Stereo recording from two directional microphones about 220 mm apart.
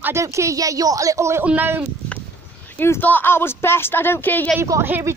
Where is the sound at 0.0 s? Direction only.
15° right (ahead or behind).